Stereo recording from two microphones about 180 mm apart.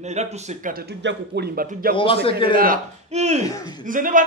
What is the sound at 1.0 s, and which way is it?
A man's voice, 65° right (ahead or behind).